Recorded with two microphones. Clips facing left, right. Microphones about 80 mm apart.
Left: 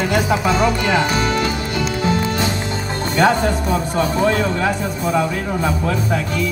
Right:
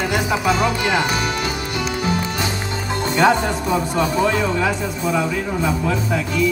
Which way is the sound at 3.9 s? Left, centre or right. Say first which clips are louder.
Left 3 dB; left.